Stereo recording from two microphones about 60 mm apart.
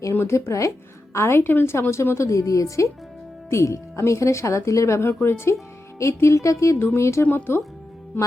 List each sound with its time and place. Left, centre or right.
0.1 s speech: left
0.3 s speech: left
1.1 s a woman's voice: left
4.9 s a woman's voice: left
6.7 s a woman's voice: left
7.3 s speech: left